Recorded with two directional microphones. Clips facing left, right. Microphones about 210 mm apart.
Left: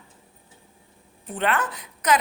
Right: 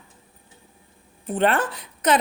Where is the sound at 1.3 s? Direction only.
30° right (ahead or behind).